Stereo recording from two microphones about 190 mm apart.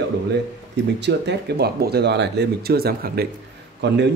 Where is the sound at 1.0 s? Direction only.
65° right (ahead or behind).